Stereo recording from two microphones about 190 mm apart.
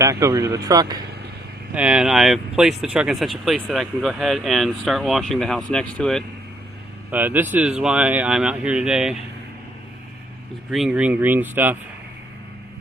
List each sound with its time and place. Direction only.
0.0 s speech: 15° right (ahead or behind)
1.7 s speech: 5° right (ahead or behind)
7.1 s speech: 10° right (ahead or behind)
10.7 s speech: centre (ahead or behind)